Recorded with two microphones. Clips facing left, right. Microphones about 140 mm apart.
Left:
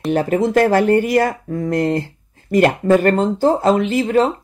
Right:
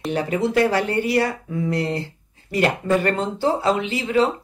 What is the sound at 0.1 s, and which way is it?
Speech, 45° left (ahead or behind).